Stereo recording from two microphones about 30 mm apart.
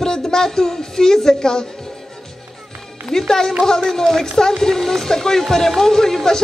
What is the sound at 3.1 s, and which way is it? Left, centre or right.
A woman's voice, centre.